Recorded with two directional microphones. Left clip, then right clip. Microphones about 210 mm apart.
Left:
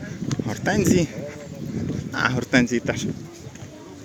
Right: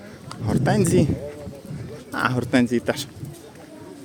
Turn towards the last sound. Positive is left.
turn(degrees=-20)  # may be behind; listen again after turning